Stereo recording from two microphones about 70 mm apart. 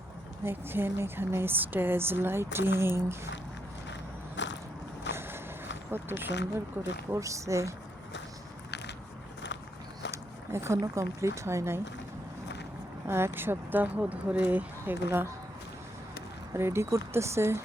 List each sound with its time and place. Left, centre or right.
0.4 s speech: right
5.9 s speech: right
7.1 s speech: right
10.1 s a sound: right
10.9 s speech: right
13.1 s speech: right
16.6 s speech: right